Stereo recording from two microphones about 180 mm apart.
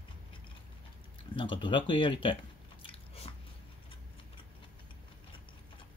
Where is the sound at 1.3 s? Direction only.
30° left (ahead or behind).